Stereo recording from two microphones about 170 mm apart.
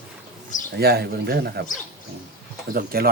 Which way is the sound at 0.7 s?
70° right (ahead or behind).